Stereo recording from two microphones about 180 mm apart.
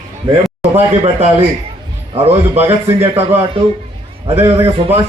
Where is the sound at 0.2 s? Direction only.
30° right (ahead or behind).